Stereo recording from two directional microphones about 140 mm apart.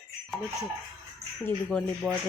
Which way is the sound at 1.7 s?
10° left (ahead or behind).